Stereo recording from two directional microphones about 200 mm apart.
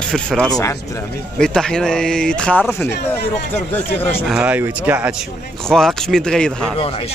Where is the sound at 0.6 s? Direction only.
15° left (ahead or behind).